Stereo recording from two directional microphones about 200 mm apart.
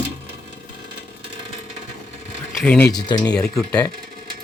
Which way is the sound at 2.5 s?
5° left (ahead or behind).